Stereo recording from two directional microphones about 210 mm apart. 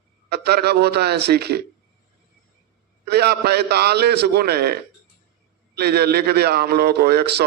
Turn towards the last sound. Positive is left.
turn(degrees=-50)  # may be behind; listen again after turning